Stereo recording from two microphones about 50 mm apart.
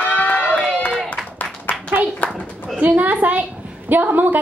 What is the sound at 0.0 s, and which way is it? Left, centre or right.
Run, left.